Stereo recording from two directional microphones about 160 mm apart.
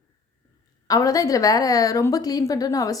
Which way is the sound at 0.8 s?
20° left (ahead or behind).